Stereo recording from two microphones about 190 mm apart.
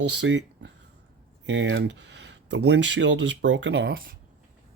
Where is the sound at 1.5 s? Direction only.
85° right; by 4.1 s 55° right (ahead or behind).